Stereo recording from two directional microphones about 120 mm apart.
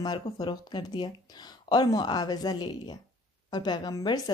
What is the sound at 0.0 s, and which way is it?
A woman's voice, 35° left (ahead or behind).